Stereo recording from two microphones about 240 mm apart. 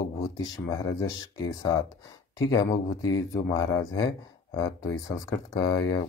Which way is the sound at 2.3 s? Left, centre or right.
Centre.